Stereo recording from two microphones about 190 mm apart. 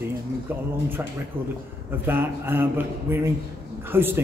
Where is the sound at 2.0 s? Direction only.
10° right (ahead or behind).